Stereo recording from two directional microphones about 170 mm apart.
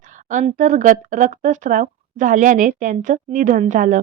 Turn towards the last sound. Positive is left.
turn(degrees=-50)  # may be behind; listen again after turning